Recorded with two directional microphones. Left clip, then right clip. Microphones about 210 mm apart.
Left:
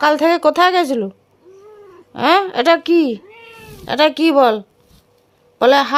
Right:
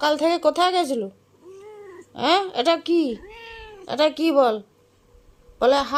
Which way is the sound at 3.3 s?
20° right (ahead or behind).